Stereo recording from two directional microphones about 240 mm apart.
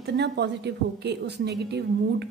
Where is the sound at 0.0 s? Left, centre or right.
Right.